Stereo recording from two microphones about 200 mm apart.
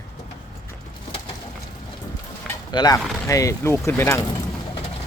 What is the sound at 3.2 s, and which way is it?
Speech, 15° left (ahead or behind).